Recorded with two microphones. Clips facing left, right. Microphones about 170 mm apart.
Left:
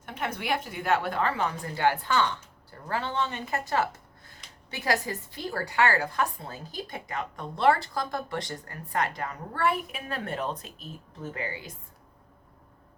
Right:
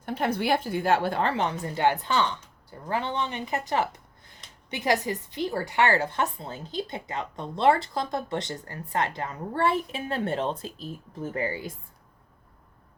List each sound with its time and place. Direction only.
0.0 s a woman's voice: 35° right (ahead or behind); by 3.6 s 15° right (ahead or behind)
4.7 s a woman's voice: 20° right (ahead or behind)
11.3 s a woman's voice: 40° right (ahead or behind)